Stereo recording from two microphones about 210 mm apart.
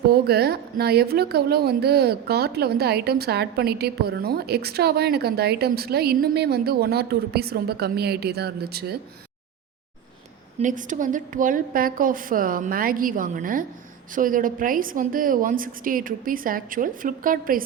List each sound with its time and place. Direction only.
0.1 s a woman's voice: 50° right (ahead or behind)
10.6 s a woman's voice: 35° right (ahead or behind)